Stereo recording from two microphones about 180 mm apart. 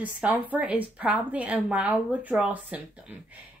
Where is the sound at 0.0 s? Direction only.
10° right (ahead or behind).